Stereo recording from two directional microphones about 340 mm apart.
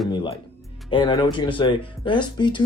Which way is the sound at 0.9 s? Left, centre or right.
Centre.